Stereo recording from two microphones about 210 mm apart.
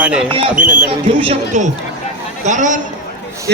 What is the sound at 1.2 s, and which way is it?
A man's voice, 30° right (ahead or behind).